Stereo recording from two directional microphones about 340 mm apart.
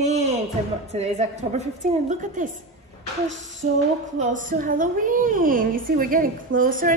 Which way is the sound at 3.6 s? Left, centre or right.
Right.